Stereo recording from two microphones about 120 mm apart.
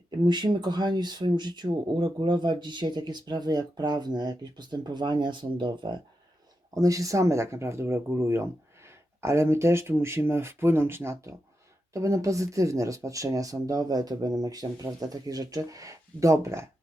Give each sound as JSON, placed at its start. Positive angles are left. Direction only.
{"t": 0.3, "sound": "speech", "side_deg": -40}
{"t": 6.7, "sound": "speech", "side_deg": -30}